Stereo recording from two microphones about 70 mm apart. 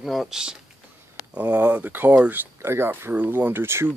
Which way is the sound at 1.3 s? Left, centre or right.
Right.